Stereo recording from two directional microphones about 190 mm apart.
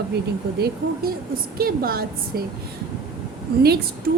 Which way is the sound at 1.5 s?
50° right (ahead or behind).